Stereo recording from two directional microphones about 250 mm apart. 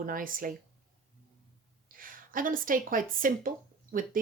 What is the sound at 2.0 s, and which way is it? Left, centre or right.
Speech, right.